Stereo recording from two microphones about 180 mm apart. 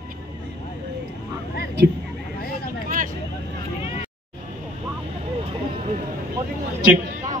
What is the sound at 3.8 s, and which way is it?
Vehicle, 30° left (ahead or behind).